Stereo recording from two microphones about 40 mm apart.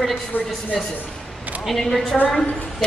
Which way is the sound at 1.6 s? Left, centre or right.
Centre.